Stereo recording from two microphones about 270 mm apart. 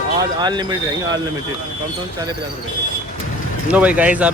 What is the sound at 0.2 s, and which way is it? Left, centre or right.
Speech, centre.